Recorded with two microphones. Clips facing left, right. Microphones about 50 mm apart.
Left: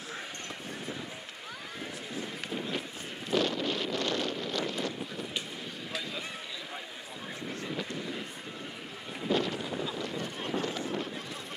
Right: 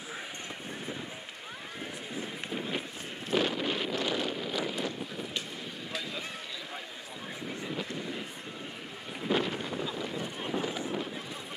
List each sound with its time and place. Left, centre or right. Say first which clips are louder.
1.8 s run: even; centre
3.3 s wind noise: even; centre
7.6 s vehicle: even; centre
9.2 s boat: even; centre